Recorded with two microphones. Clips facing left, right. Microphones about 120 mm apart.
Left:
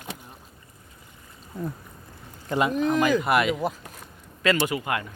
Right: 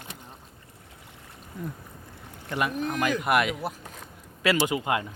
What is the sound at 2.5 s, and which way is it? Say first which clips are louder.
Speech: left 5 dB; 20° left (ahead or behind).